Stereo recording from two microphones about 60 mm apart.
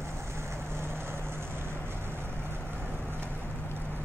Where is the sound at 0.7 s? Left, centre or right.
Right.